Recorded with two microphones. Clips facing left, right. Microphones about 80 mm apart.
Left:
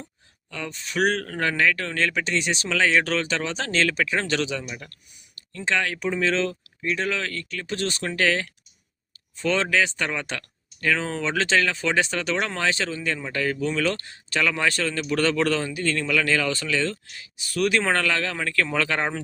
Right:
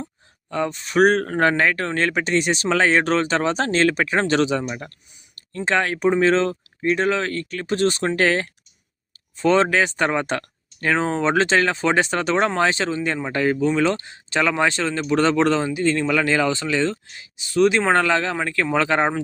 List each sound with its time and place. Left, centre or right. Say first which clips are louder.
0.5 s speech: right 9 dB; right